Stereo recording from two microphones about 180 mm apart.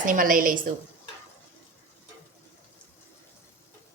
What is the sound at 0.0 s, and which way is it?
Speech, 50° right (ahead or behind).